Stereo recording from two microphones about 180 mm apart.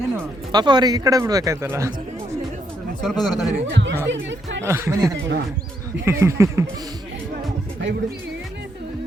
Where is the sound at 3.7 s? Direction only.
85° right.